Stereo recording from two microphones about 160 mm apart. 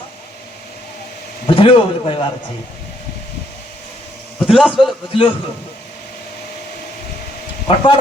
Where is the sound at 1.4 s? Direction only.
35° left (ahead or behind).